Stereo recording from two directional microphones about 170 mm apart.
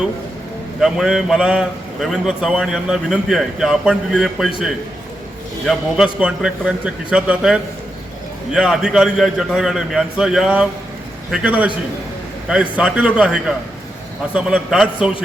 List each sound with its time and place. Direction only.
0.8 s a man's voice: 5° right (ahead or behind)
5.6 s a man's voice: 5° right (ahead or behind)